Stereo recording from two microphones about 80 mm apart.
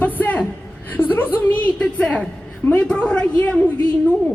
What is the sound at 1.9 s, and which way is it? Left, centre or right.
A woman's voice, centre.